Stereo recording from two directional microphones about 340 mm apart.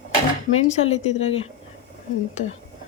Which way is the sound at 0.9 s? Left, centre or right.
Centre.